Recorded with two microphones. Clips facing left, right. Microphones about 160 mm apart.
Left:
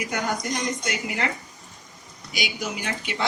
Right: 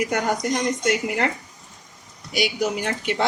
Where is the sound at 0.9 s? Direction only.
55° right (ahead or behind).